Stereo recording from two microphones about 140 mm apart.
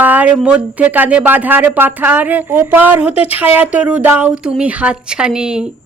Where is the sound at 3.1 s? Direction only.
45° left (ahead or behind).